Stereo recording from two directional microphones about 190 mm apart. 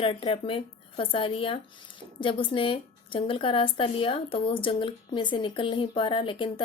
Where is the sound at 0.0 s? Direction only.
30° left (ahead or behind).